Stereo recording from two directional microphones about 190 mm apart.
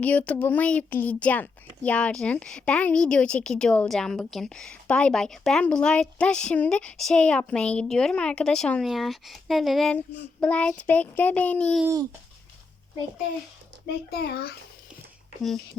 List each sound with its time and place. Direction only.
0.0 s a child's voice: 10° left (ahead or behind)
10.4 s child singing: 5° left (ahead or behind)
14.1 s a child's voice: 55° left (ahead or behind)